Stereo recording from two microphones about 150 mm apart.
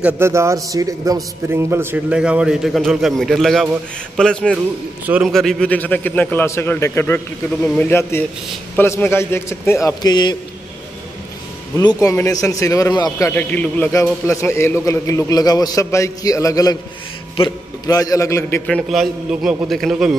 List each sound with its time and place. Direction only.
0.0 s a man's voice: 15° right (ahead or behind); by 4.6 s 5° left (ahead or behind)
5.0 s a man's voice: 10° right (ahead or behind)
5.3 s a man's voice: 5° left (ahead or behind); by 10.3 s 25° left (ahead or behind)
11.7 s a man's voice: 25° left (ahead or behind)
13.3 s a man's voice: 10° left (ahead or behind)
18.7 s a man's voice: centre (ahead or behind)